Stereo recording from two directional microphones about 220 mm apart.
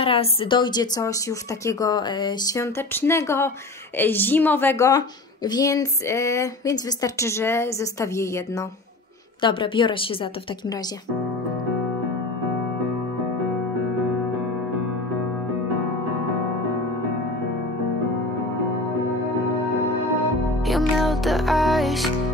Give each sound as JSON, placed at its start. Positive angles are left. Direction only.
{"t": 0.0, "sound": "a woman's voice", "side_deg": 25}
{"t": 20.6, "sound": "music", "side_deg": 0}